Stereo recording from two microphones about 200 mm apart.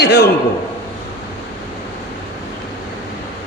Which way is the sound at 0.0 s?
55° left (ahead or behind).